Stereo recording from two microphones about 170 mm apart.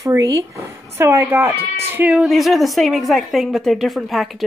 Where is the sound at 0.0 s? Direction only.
20° right (ahead or behind).